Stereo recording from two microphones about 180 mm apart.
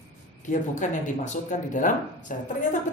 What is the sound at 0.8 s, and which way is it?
A woman's voice, 45° left (ahead or behind).